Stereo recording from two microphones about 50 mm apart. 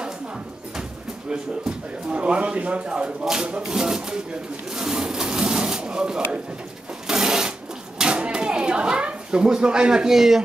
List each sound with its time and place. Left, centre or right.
1.3 s speech: centre
4.7 s sewing machine: centre
8.0 s a sound: right